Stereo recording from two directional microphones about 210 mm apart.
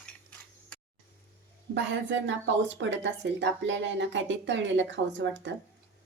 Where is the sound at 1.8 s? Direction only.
60° right (ahead or behind).